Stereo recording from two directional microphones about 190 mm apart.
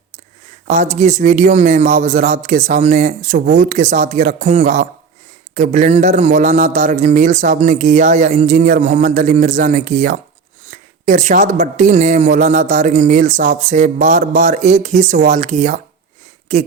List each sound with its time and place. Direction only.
0.7 s a man's voice: 40° right (ahead or behind)